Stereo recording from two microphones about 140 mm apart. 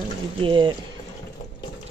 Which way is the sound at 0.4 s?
35° right (ahead or behind).